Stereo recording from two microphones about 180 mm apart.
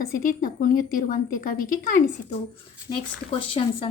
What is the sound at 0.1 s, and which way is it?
A woman's voice, 50° left (ahead or behind).